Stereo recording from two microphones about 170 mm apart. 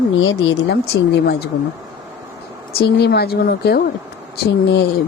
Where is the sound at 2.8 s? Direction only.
70° left (ahead or behind).